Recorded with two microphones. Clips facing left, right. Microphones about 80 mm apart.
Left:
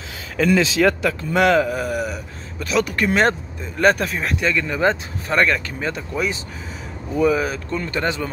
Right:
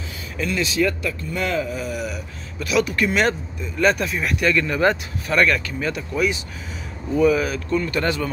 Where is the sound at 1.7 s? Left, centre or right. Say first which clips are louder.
Left 4 dB; left.